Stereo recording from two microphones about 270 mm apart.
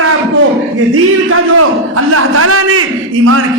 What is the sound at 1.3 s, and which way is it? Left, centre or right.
A man's voice, right.